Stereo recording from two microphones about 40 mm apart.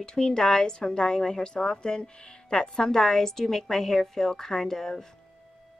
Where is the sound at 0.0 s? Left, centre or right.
Centre.